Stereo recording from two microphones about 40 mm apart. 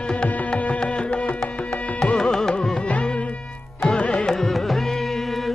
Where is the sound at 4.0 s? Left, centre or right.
Left.